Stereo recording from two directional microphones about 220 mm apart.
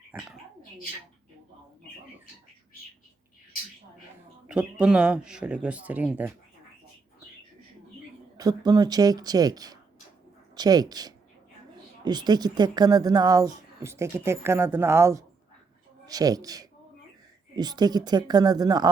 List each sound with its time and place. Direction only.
0.1 s speech: 5° right (ahead or behind)
4.4 s speech: 5° right (ahead or behind)
8.4 s a woman's voice: 15° right (ahead or behind)